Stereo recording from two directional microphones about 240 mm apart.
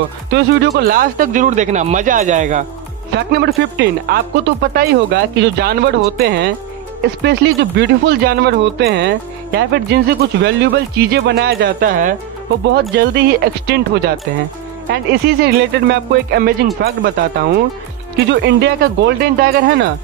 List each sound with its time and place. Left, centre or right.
0.3 s speech: right
3.2 s speech: right
12.9 s speech: right
18.1 s speech: right